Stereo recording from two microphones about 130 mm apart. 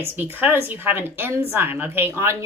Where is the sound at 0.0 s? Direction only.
15° right (ahead or behind).